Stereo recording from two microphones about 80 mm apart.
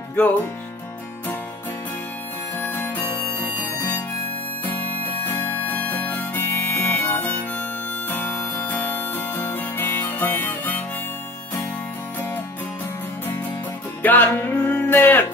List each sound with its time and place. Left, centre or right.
0.1 s music: left
2.6 s music: left
5.2 s harmonica: left
8.6 s music: left
14.0 s music: left